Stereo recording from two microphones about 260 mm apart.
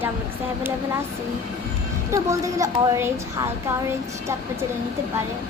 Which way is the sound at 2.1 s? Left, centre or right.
Centre.